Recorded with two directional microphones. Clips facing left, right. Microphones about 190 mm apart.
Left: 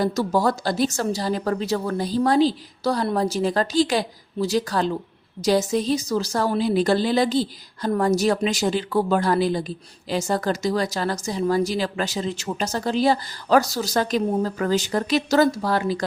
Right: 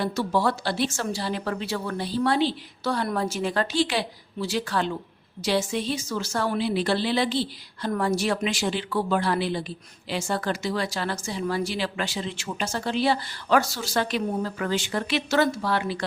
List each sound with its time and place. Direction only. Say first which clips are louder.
0.0 s a woman's voice: left 3 dB; 40° left (ahead or behind)